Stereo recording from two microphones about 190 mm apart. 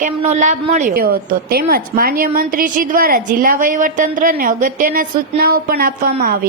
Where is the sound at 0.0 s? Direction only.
40° right (ahead or behind).